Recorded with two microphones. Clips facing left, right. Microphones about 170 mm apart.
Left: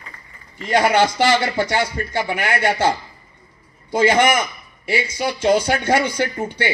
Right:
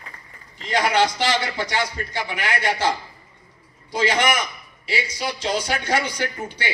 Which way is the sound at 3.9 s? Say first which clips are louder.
Left 5 dB; 45° left (ahead or behind).